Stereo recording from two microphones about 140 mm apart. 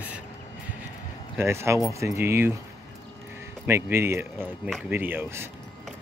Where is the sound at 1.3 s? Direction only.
20° right (ahead or behind).